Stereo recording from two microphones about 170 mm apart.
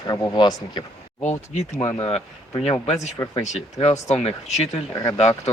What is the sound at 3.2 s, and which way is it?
Speech, 15° left (ahead or behind).